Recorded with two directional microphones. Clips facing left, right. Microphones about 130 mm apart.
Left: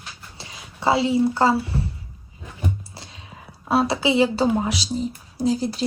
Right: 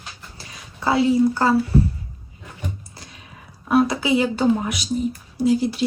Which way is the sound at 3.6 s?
30° left (ahead or behind).